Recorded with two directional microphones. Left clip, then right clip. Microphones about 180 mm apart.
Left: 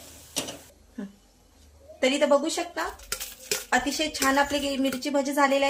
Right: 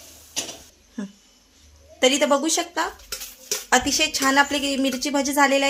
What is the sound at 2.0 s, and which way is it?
A woman's voice, 65° right (ahead or behind).